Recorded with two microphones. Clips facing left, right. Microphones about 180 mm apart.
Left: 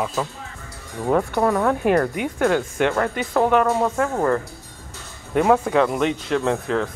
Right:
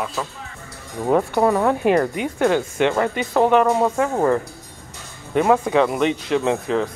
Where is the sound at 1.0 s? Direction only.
10° right (ahead or behind).